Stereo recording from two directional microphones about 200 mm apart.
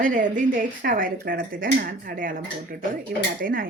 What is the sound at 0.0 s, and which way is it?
Speech, 40° right (ahead or behind).